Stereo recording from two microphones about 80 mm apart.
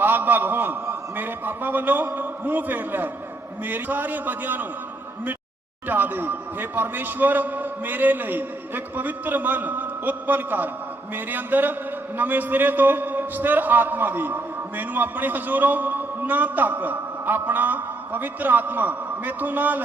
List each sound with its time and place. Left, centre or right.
0.0 s a man's voice: right
5.9 s a man's voice: right